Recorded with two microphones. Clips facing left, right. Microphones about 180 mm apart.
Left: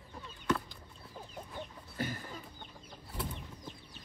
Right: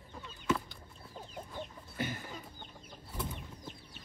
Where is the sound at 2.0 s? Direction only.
35° left (ahead or behind).